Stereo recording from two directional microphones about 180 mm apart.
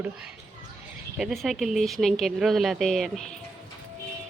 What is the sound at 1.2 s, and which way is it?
A woman's voice, centre (ahead or behind).